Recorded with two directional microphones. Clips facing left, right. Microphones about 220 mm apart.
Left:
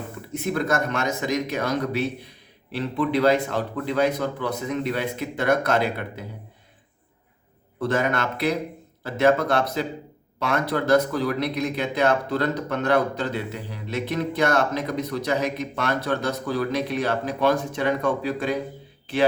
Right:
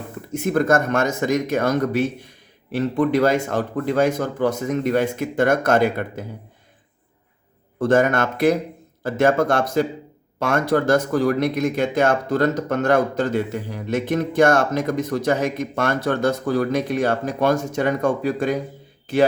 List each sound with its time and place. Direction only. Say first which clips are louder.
0.3 s speech: right 6 dB; 45° right (ahead or behind)
7.8 s speech: right 6 dB; 50° right (ahead or behind)